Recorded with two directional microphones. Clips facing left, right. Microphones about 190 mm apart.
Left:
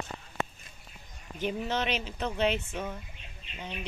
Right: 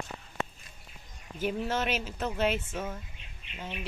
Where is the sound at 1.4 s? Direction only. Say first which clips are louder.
Right 1 dB; 5° right (ahead or behind).